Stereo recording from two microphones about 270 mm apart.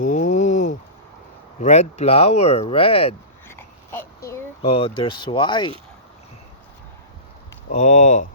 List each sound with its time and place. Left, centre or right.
0.0 s a sound: left
1.6 s speech: left
4.6 s speech: left
7.7 s speech: left